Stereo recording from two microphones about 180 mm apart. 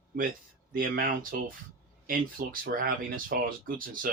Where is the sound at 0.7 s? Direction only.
55° right (ahead or behind).